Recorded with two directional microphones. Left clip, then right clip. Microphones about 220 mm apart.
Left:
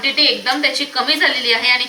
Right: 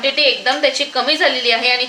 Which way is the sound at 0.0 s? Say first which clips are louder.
Right 1 dB; 70° right (ahead or behind).